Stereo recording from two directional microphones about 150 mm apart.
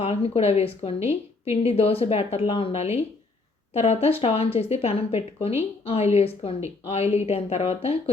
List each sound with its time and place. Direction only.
0.0 s speech: 40° left (ahead or behind)